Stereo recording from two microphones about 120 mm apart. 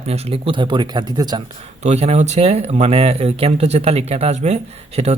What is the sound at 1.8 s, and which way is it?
Speech, 65° right (ahead or behind).